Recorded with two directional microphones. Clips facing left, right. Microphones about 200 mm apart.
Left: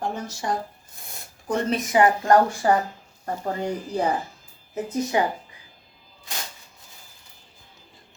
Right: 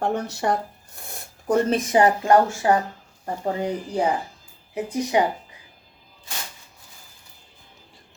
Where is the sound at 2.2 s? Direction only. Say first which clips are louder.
Right 1 dB; 5° right (ahead or behind).